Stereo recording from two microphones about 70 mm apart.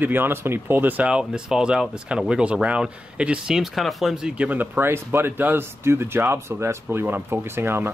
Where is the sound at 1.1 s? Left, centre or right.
Centre.